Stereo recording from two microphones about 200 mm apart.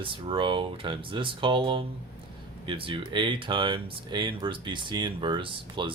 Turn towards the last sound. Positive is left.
turn(degrees=-25)  # may be behind; listen again after turning